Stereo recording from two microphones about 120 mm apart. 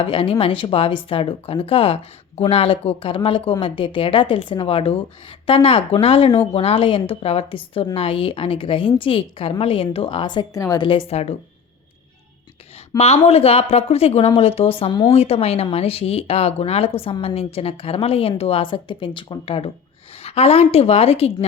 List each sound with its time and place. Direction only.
0.0 s speech: 50° left (ahead or behind)
10.5 s a woman's voice: 30° left (ahead or behind)
10.8 s a woman's voice: 55° left (ahead or behind)
13.0 s a woman's voice: 60° left (ahead or behind); by 15.1 s 40° left (ahead or behind)
15.1 s speech: 55° left (ahead or behind)
20.2 s a woman's voice: 60° left (ahead or behind)